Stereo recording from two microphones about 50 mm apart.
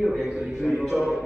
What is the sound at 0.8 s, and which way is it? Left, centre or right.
Speech, centre.